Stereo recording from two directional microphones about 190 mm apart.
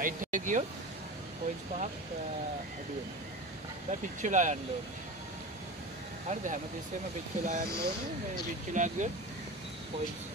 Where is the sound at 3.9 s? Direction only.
40° right (ahead or behind).